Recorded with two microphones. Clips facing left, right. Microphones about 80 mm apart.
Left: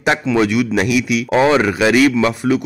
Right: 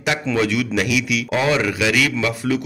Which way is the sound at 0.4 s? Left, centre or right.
Left.